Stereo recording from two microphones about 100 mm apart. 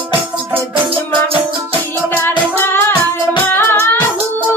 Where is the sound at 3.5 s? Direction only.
20° left (ahead or behind).